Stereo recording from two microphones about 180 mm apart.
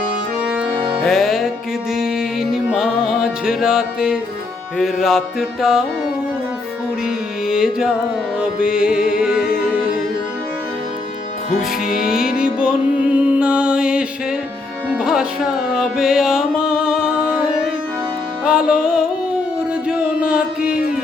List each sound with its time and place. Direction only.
1.0 s music: centre (ahead or behind)
7.4 s music: 5° right (ahead or behind)
9.0 s music: 50° left (ahead or behind)
9.2 s music: 5° right (ahead or behind)
12.2 s music: 50° left (ahead or behind)
12.5 s music: 5° right (ahead or behind)
18.4 s music: 5° right (ahead or behind)